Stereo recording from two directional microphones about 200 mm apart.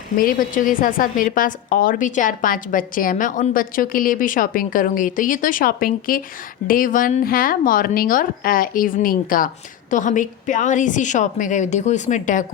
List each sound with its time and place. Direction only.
0.2 s a woman's voice: 45° left (ahead or behind)